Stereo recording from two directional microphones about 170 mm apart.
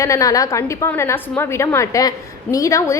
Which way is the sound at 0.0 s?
20° left (ahead or behind).